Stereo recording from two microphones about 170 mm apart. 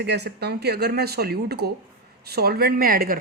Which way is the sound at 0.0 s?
80° right.